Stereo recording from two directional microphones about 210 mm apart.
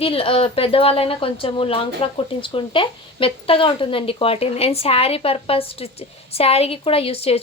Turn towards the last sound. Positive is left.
turn(degrees=30)  # may be behind; listen again after turning